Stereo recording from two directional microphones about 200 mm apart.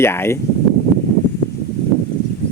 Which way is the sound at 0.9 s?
5° left (ahead or behind).